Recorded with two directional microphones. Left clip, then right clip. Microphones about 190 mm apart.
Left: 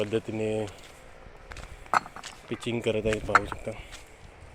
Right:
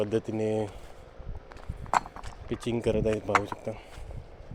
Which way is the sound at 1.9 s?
10° right (ahead or behind).